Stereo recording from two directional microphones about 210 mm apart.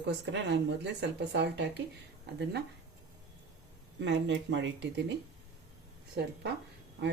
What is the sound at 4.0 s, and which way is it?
Speech, 60° right (ahead or behind).